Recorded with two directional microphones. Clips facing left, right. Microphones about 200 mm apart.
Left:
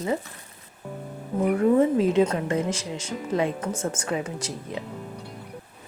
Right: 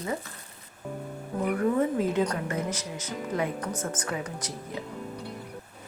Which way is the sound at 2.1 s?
25° left (ahead or behind).